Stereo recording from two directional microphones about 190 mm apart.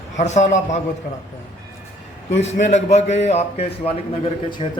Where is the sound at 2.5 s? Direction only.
35° left (ahead or behind).